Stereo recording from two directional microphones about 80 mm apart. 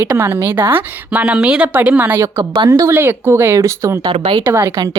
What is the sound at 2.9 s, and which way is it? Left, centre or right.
Speech, right.